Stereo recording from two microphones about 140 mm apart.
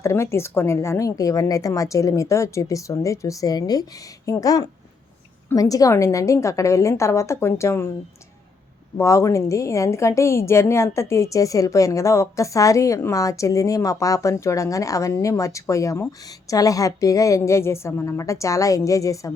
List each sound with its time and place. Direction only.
0.0 s a woman's voice: 20° left (ahead or behind)
9.0 s a woman's voice: 20° left (ahead or behind)